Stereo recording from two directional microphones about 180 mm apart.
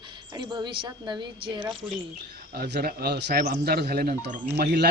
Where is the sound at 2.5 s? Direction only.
65° right (ahead or behind).